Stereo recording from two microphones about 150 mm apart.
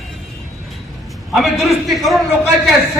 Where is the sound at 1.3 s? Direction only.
Centre (ahead or behind).